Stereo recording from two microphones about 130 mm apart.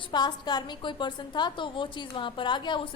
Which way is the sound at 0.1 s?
35° left (ahead or behind).